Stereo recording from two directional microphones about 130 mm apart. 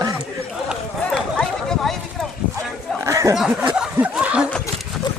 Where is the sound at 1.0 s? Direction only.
5° left (ahead or behind).